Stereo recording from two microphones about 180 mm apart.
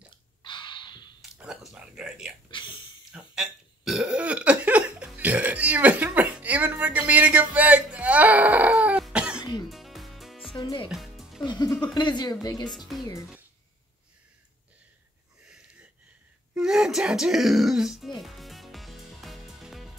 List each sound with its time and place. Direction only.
0.1 s a sound: 25° left (ahead or behind)
1.3 s speech: 5° right (ahead or behind)
2.5 s speech: 25° left (ahead or behind)
3.1 s burping: 5° right (ahead or behind)
9.7 s music: centre (ahead or behind)
10.5 s music: 25° left (ahead or behind)
10.9 s music: centre (ahead or behind)
11.4 s speech: 20° left (ahead or behind)
12.6 s speech: centre (ahead or behind)
15.4 s wheeze: 5° right (ahead or behind)
16.5 s music: 5° right (ahead or behind)